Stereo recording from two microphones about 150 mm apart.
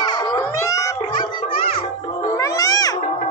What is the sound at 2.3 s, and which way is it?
Cat, 25° left (ahead or behind).